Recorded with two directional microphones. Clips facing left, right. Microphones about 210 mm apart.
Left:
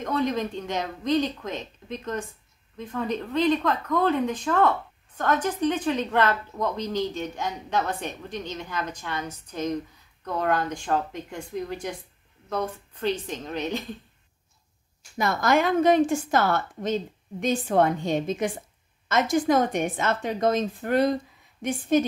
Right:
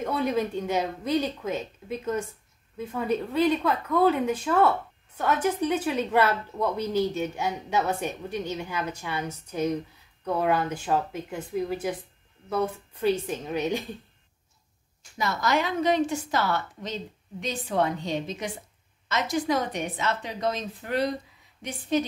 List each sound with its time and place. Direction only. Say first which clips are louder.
0.0 s speech: even; 10° right (ahead or behind)
15.1 s a woman's voice: left 4 dB; 50° left (ahead or behind)